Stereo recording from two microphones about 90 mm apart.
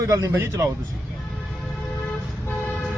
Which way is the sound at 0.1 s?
40° right (ahead or behind).